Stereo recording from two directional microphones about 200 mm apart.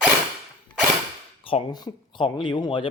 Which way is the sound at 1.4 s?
25° left (ahead or behind).